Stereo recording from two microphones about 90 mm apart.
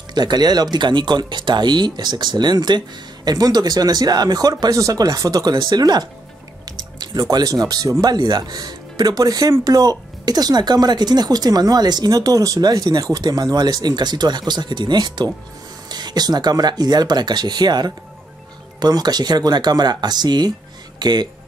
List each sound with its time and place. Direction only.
0.1 s speech: 50° right (ahead or behind)